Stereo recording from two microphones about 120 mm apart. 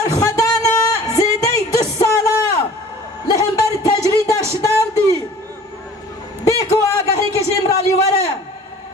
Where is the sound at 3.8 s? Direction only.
30° left (ahead or behind).